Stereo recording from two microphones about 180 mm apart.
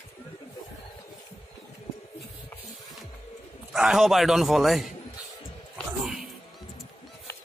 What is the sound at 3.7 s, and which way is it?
A man's voice, centre (ahead or behind).